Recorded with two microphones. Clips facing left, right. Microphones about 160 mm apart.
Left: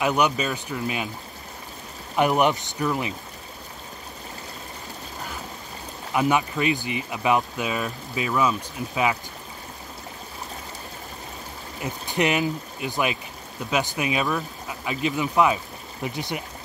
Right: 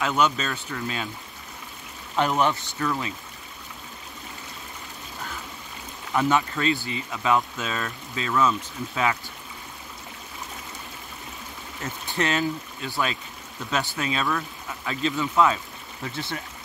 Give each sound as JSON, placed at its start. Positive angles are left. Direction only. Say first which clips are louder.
{"t": 0.0, "sound": "speech", "louder": "left 2 dB", "side_deg": 15}
{"t": 2.1, "sound": "speech", "louder": "left 3 dB", "side_deg": 15}
{"t": 6.1, "sound": "speech", "louder": "left 1 dB", "side_deg": 15}
{"t": 11.8, "sound": "speech", "louder": "left 3 dB", "side_deg": 15}